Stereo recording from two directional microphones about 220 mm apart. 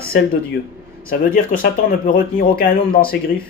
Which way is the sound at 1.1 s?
40° left (ahead or behind).